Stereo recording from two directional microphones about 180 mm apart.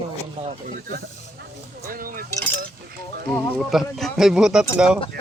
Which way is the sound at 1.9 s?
50° right (ahead or behind).